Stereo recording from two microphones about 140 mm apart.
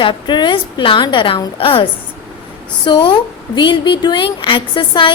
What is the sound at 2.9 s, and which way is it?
A woman's voice, 35° left (ahead or behind).